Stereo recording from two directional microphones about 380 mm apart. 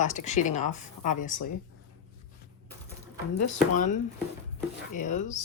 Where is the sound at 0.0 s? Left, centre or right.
Centre.